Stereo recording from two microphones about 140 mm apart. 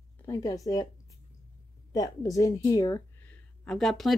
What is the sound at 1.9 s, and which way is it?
A woman's voice, 25° left (ahead or behind).